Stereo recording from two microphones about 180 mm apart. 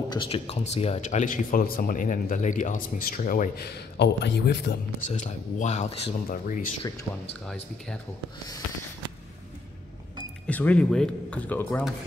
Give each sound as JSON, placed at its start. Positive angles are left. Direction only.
{"t": 0.1, "sound": "speech", "side_deg": 30}
{"t": 5.0, "sound": "speech", "side_deg": 45}
{"t": 6.2, "sound": "speech", "side_deg": 50}
{"t": 10.4, "sound": "speech", "side_deg": 10}